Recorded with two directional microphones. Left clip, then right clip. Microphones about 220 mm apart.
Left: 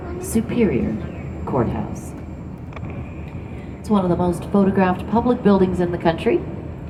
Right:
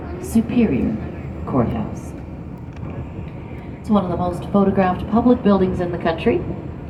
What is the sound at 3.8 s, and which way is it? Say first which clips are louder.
A woman's voice: left 1 dB; 50° left (ahead or behind).